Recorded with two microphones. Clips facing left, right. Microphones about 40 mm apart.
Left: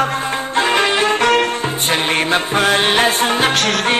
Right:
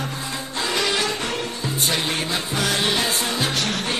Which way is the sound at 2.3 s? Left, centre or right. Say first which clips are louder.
Left 10 dB; left.